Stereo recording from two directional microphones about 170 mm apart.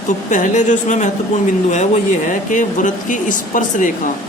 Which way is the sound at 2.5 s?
50° left (ahead or behind).